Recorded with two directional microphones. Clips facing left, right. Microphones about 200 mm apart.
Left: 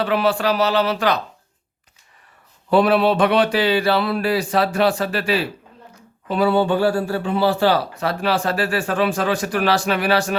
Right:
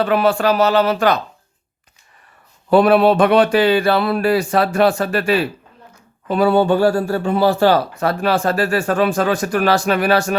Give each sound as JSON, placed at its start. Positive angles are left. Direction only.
{"t": 0.0, "sound": "speech", "side_deg": -50}
{"t": 2.6, "sound": "speech", "side_deg": -50}